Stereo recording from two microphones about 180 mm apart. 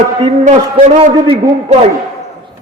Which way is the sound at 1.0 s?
35° right (ahead or behind).